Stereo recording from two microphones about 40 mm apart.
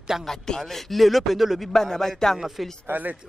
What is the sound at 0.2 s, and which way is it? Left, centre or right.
Speech, centre.